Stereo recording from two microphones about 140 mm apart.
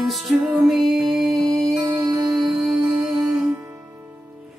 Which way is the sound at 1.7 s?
25° right (ahead or behind).